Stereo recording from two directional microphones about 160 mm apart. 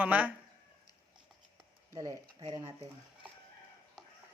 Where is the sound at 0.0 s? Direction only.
10° right (ahead or behind).